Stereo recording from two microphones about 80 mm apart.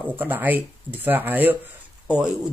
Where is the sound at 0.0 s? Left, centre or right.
Right.